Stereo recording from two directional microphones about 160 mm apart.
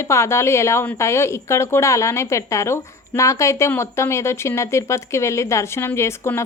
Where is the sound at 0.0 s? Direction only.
15° left (ahead or behind).